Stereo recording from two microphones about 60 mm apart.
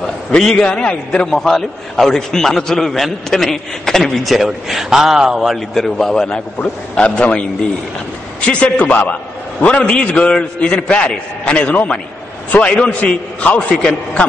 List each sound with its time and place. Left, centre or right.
0.6 s a man's voice: centre
5.9 s a man's voice: centre